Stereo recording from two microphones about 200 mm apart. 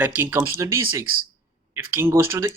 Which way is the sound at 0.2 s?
10° right (ahead or behind).